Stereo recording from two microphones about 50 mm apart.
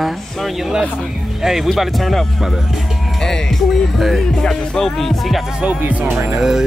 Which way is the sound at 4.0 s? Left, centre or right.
Centre.